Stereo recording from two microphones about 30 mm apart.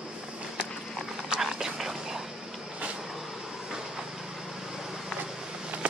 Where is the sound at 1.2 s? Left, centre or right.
Centre.